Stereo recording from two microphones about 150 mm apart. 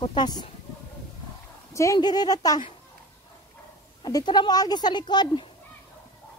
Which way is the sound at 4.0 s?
25° left (ahead or behind).